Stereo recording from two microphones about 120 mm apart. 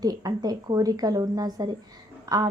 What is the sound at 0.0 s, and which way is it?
A woman's voice, 30° right (ahead or behind).